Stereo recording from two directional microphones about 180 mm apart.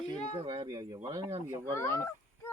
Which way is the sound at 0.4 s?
35° right (ahead or behind).